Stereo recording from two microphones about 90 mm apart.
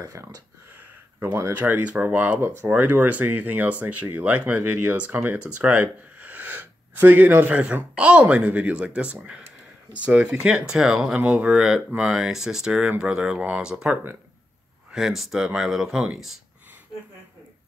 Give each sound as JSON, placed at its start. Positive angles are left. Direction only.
{"t": 0.0, "sound": "speech", "side_deg": -40}
{"t": 0.7, "sound": "speech", "side_deg": -25}